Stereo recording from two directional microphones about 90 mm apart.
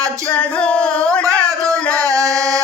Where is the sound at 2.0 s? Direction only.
40° right (ahead or behind).